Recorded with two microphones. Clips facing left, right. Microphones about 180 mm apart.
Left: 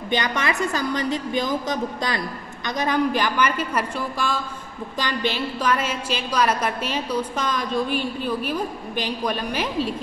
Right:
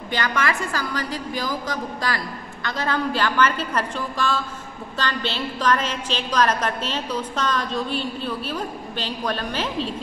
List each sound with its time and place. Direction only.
0.1 s a woman's voice: 20° left (ahead or behind)